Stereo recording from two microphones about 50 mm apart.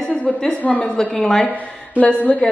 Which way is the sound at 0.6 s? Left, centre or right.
Left.